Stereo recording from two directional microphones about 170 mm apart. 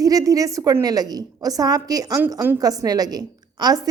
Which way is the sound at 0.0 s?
20° right (ahead or behind).